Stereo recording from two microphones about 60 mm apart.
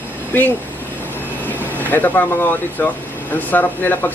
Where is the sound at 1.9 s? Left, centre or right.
Left.